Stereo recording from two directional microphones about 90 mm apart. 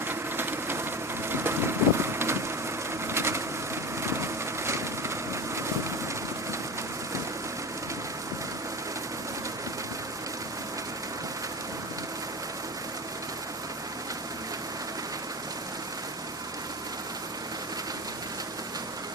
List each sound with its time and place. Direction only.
0.1 s engine: 25° right (ahead or behind)
1.3 s a sound: 25° right (ahead or behind)
4.0 s crushing: 30° right (ahead or behind)